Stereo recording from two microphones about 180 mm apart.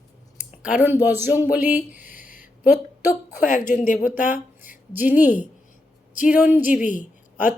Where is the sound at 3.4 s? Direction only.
45° left (ahead or behind).